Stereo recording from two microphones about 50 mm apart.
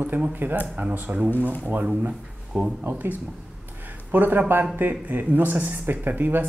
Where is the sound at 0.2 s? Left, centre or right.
Right.